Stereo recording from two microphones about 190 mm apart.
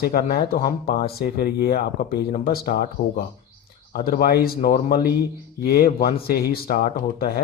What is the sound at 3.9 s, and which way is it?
Speech, 50° left (ahead or behind).